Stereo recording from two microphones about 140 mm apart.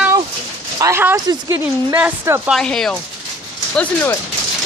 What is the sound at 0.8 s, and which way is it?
Speech, 20° right (ahead or behind).